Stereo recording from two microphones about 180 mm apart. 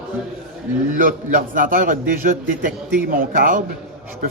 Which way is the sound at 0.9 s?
50° right (ahead or behind).